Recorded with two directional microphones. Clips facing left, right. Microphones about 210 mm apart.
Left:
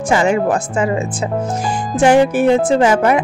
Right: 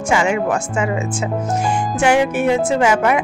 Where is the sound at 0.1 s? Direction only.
35° left (ahead or behind).